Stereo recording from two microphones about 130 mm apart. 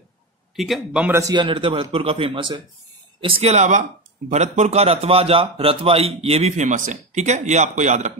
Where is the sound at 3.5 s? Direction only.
70° right (ahead or behind).